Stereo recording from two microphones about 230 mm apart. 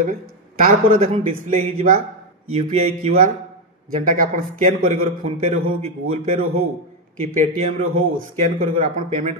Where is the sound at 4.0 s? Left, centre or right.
Right.